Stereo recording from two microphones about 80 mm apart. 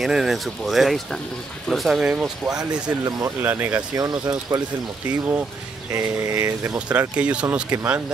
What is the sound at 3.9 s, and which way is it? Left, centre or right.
Speech, right.